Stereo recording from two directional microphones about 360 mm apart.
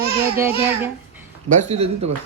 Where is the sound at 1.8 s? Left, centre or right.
Right.